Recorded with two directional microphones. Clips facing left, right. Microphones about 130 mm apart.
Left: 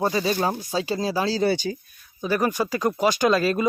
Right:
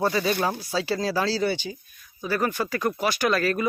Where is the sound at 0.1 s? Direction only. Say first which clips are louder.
Left 1 dB; 30° left (ahead or behind).